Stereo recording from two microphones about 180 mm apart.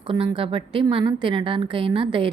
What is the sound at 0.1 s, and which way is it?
Speech, 30° right (ahead or behind).